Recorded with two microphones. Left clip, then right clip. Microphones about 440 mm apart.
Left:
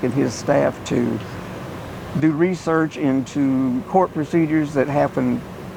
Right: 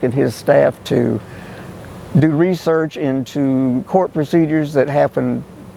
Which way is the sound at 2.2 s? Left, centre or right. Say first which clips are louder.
Right 4 dB; right.